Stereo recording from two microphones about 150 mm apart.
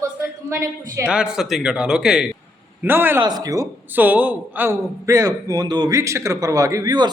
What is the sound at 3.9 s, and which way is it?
A man's voice, 10° right (ahead or behind).